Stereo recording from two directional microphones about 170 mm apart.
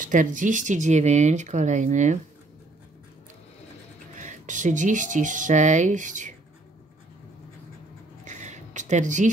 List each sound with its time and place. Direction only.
0.0 s speech: 50° right (ahead or behind)
4.1 s speech: 45° right (ahead or behind)
8.3 s a sound: 45° right (ahead or behind)